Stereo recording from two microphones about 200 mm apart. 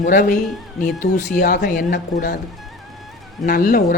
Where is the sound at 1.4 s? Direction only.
40° left (ahead or behind).